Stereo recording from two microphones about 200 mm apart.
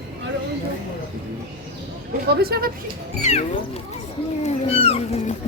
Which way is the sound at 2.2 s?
50° right (ahead or behind).